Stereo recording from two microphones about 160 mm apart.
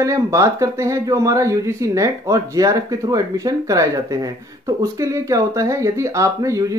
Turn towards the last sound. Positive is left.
turn(degrees=-20)  # may be behind; listen again after turning